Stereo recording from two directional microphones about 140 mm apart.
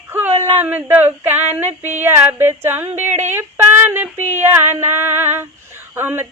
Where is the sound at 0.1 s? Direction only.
15° right (ahead or behind).